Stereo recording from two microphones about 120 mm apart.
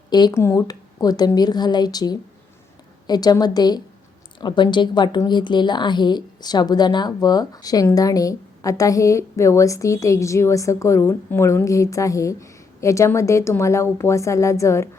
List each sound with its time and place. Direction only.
0.1 s speech: 35° left (ahead or behind)
0.3 s a woman's voice: 25° left (ahead or behind)